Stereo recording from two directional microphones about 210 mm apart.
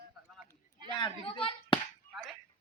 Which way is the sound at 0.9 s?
25° left (ahead or behind).